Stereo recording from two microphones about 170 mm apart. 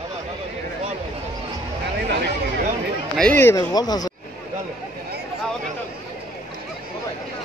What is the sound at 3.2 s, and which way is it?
Speech, 10° left (ahead or behind).